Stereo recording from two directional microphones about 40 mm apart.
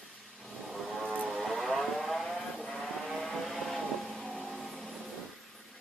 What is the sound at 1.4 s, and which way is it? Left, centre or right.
Vehicle, centre.